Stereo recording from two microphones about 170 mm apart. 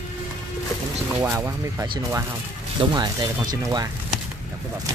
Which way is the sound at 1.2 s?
15° right (ahead or behind).